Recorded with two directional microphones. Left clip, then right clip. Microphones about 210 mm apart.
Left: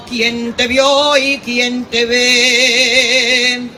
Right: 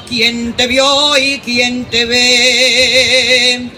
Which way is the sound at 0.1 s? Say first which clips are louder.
Right 3 dB; 20° right (ahead or behind).